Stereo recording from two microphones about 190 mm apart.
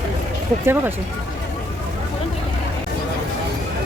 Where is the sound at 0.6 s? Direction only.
10° right (ahead or behind).